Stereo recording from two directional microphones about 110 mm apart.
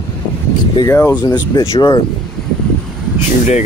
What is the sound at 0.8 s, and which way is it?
Speech, 20° left (ahead or behind).